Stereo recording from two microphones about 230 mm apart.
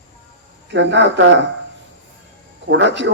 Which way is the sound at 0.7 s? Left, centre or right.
Right.